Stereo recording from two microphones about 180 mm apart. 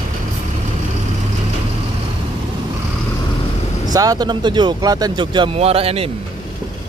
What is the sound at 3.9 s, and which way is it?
Speech, 20° right (ahead or behind).